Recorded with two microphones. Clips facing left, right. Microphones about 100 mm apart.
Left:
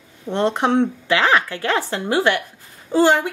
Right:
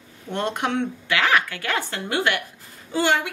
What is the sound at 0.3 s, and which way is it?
A woman's voice, 25° left (ahead or behind).